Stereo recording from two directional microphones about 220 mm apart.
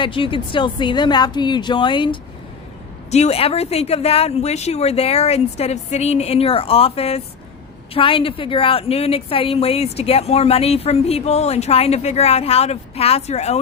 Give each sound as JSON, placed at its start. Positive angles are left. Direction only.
{"t": 0.0, "sound": "a woman's voice", "side_deg": 25}